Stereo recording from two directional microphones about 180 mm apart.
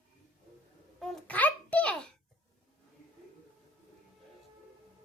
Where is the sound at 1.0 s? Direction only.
5° left (ahead or behind).